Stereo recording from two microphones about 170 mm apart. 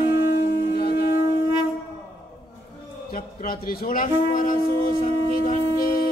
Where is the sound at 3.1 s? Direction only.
55° left (ahead or behind).